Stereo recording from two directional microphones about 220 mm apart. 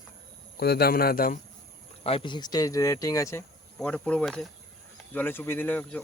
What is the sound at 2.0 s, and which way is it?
Speech, 25° left (ahead or behind).